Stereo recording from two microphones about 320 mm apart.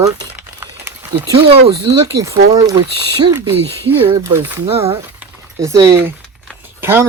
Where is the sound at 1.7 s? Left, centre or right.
Centre.